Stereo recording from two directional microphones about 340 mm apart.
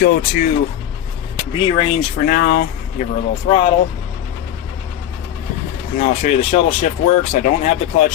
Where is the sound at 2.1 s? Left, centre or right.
Left.